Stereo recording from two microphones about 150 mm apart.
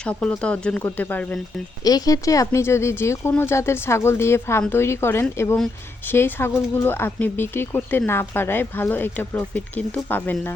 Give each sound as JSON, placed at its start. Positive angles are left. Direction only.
{"t": 0.0, "sound": "speech", "side_deg": 10}
{"t": 1.8, "sound": "speech", "side_deg": 25}